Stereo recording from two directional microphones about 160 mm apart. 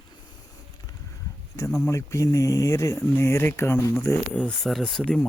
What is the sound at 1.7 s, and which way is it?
Speech, 20° left (ahead or behind).